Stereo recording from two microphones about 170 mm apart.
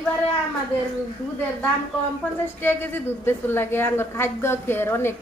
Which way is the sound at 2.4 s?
10° left (ahead or behind).